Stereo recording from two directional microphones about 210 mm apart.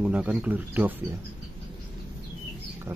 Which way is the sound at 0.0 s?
5° right (ahead or behind).